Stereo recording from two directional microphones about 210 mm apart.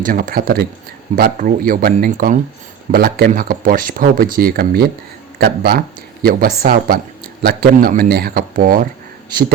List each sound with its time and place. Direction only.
0.0 s speech: 40° right (ahead or behind)